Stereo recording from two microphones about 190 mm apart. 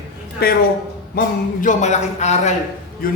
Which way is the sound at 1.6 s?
40° left (ahead or behind).